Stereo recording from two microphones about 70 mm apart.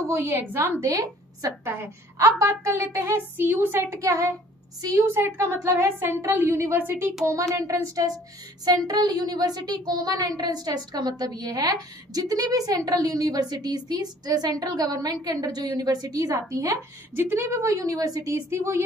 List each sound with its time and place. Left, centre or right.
0.1 s a woman's voice: right
0.7 s a woman's voice: right
1.6 s a woman's voice: right
2.3 s a woman's voice: right
2.9 s a woman's voice: right
4.0 s a woman's voice: right
4.9 s a woman's voice: right
7.2 s a woman's voice: right
8.6 s a woman's voice: right
17.1 s a woman's voice: right
18.5 s a woman's voice: right